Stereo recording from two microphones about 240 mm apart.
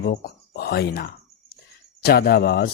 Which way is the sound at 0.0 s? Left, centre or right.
Left.